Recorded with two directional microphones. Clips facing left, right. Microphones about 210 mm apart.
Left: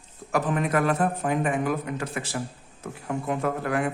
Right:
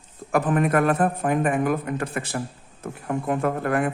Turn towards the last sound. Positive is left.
turn(degrees=-50)  # may be behind; listen again after turning